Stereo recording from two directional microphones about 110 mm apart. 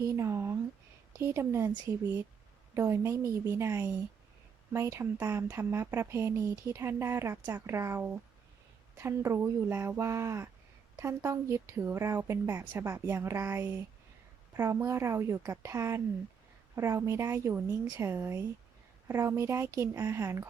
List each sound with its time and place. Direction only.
0.0 s speech: 25° right (ahead or behind)